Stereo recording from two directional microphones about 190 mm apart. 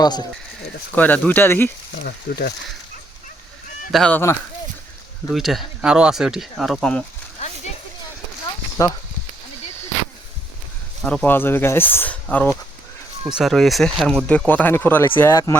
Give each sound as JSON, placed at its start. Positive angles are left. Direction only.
{"t": 0.0, "sound": "speech", "side_deg": 20}
{"t": 0.9, "sound": "speech", "side_deg": 10}
{"t": 2.0, "sound": "speech", "side_deg": 55}
{"t": 3.9, "sound": "speech", "side_deg": 5}
{"t": 5.3, "sound": "speech", "side_deg": 0}
{"t": 11.0, "sound": "speech", "side_deg": 5}